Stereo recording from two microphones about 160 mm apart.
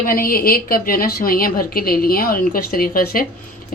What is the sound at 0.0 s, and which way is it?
Speech, 65° left (ahead or behind).